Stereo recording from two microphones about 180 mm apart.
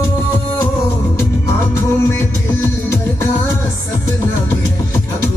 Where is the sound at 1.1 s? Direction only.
15° left (ahead or behind).